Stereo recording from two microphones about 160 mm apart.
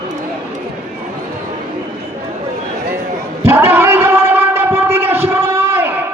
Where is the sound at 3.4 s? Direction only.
15° right (ahead or behind).